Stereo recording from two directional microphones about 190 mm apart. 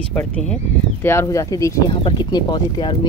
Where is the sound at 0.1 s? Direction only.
5° left (ahead or behind).